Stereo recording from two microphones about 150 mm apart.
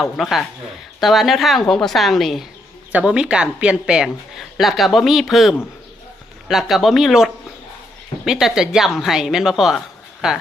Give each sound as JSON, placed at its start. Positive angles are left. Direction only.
{"t": 0.0, "sound": "a woman's voice", "side_deg": 0}